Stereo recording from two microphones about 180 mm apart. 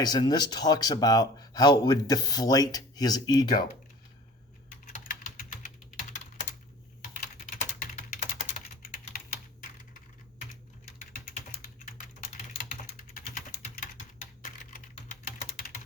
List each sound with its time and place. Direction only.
0.0 s speech: 25° left (ahead or behind)
5.0 s typing: 45° left (ahead or behind)
11.0 s typing: 45° left (ahead or behind)
13.3 s typing: 45° left (ahead or behind)